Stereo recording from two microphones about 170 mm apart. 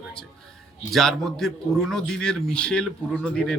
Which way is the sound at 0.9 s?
Centre (ahead or behind).